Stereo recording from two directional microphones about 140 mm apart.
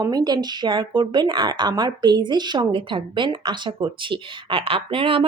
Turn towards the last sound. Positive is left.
turn(degrees=-40)  # may be behind; listen again after turning